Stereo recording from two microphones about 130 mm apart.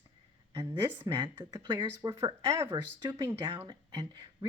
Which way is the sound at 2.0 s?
20° right (ahead or behind).